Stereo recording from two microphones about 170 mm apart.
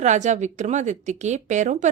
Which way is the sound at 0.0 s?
45° right (ahead or behind).